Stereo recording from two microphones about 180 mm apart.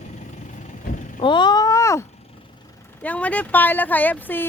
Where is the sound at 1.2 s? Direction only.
25° left (ahead or behind).